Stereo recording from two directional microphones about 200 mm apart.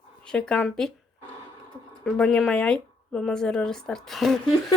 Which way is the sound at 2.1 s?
5° left (ahead or behind).